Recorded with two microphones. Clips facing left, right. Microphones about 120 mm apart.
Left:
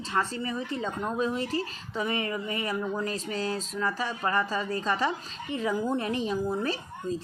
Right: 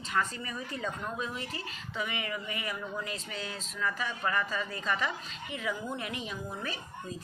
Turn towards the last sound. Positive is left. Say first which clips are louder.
# left 8 dB
turn(degrees=30)  # may be behind; listen again after turning